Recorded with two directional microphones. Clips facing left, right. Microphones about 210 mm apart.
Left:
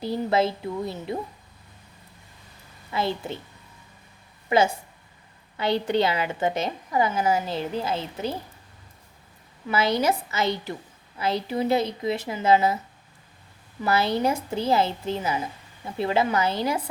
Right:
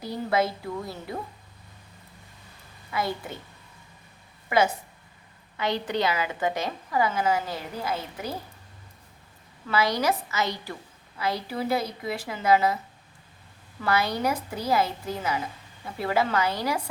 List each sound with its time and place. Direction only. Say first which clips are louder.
0.0 s a woman's voice: left 3 dB; 25° left (ahead or behind)
2.9 s a woman's voice: left 3 dB; 25° left (ahead or behind)
4.4 s a woman's voice: left 2 dB; 25° left (ahead or behind)
9.6 s a woman's voice: left 2 dB; 25° left (ahead or behind)
13.8 s a woman's voice: left 3 dB; 25° left (ahead or behind)